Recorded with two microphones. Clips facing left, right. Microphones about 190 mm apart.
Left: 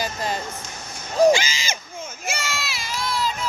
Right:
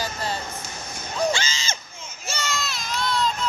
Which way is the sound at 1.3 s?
10° left (ahead or behind).